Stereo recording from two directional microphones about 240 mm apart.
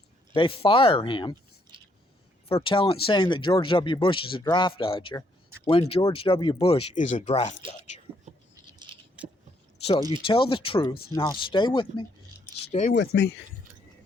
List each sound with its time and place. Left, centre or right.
0.3 s speech: left
1.7 s chewing: centre
2.6 s speech: left
9.2 s a sound: centre
10.1 s speech: left
12.7 s speech: left